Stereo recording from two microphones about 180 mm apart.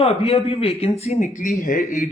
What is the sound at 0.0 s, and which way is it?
Speech, 35° left (ahead or behind).